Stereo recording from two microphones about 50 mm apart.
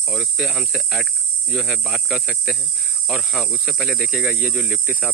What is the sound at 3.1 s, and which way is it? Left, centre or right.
Cricket, centre.